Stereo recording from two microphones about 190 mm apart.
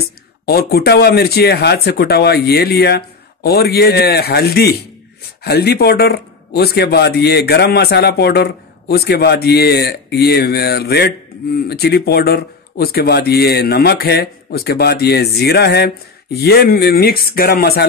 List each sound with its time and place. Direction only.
0.5 s speech: 55° left (ahead or behind)